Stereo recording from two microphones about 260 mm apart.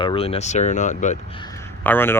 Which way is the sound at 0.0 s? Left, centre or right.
Left.